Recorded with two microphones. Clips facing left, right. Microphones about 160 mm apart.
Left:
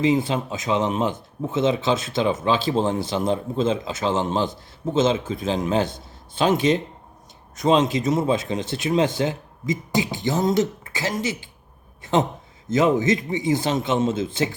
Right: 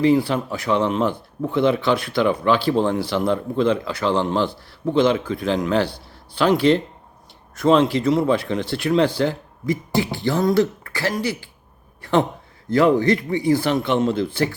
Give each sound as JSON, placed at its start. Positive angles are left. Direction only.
{"t": 0.0, "sound": "speech", "side_deg": 20}